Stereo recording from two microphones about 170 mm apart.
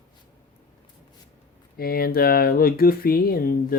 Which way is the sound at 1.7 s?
60° left (ahead or behind).